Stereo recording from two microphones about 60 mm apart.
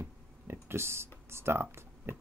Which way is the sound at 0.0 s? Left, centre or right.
Right.